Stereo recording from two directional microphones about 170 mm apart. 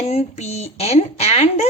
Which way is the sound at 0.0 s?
40° left (ahead or behind).